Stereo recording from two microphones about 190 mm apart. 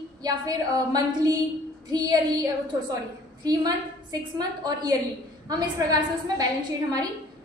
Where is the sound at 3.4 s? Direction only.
20° right (ahead or behind).